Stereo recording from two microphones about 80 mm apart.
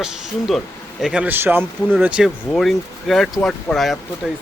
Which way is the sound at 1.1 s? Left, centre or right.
Centre.